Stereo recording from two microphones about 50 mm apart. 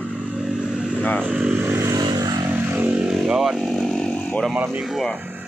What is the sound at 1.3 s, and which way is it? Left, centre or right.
Speech, centre.